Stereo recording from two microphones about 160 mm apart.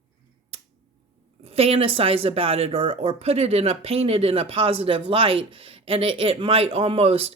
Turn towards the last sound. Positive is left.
turn(degrees=-40)  # may be behind; listen again after turning